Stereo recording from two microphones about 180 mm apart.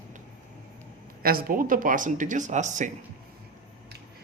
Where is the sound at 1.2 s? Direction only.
55° right (ahead or behind).